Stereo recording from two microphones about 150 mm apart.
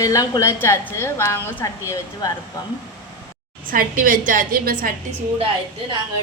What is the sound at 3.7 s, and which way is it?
A woman's voice, 65° right (ahead or behind).